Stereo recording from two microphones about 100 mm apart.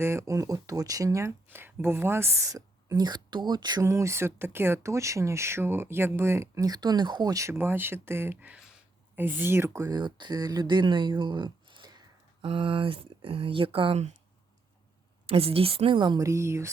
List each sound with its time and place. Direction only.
0.0 s speech: 25° right (ahead or behind); by 3.8 s 45° right (ahead or behind)
3.8 s speech: 30° right (ahead or behind)
9.9 s speech: 50° right (ahead or behind)
12.4 s speech: 60° right (ahead or behind)
15.3 s speech: 70° right (ahead or behind); by 16.2 s 50° right (ahead or behind)
16.2 s speech: 30° right (ahead or behind)